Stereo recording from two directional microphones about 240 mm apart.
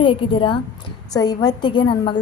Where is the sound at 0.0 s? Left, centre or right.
Left.